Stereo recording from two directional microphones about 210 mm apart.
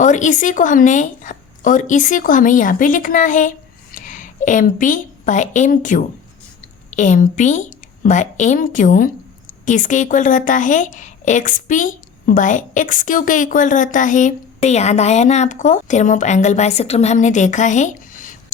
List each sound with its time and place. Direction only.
0.0 s a woman's voice: 35° left (ahead or behind)